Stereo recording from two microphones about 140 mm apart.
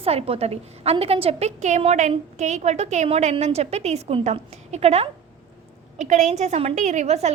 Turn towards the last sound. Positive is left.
turn(degrees=-50)  # may be behind; listen again after turning